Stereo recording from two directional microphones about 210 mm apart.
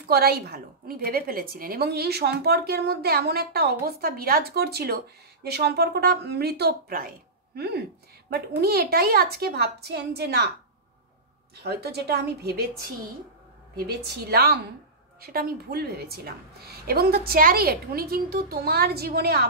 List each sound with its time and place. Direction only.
0.0 s a woman's voice: 50° right (ahead or behind)
11.6 s a woman's voice: 50° right (ahead or behind)